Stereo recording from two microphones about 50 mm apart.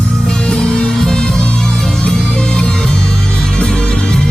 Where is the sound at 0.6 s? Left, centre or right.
Centre.